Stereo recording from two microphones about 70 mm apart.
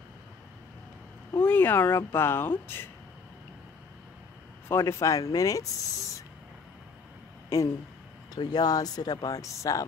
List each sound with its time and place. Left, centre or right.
1.4 s a woman's voice: left
4.6 s speech: left
7.4 s speech: left
8.4 s speech: left
9.3 s speech: left